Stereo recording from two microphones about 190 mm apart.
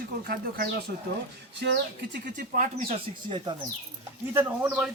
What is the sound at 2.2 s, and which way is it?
Speech, 45° right (ahead or behind).